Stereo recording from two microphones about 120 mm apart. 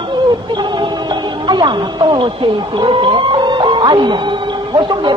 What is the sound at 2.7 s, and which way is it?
Music, 45° right (ahead or behind).